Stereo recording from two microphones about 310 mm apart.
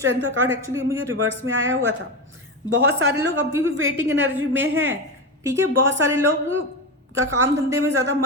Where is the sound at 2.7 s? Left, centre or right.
Right.